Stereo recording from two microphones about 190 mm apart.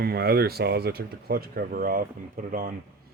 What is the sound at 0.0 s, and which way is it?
Speech, 55° right (ahead or behind).